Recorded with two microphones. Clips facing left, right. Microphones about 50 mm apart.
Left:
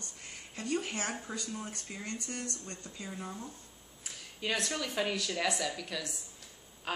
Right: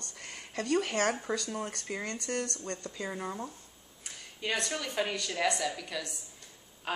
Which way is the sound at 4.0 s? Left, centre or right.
Centre.